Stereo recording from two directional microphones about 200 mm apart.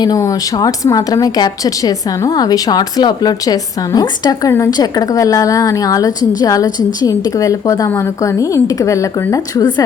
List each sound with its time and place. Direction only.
0.0 s a woman's voice: 15° left (ahead or behind)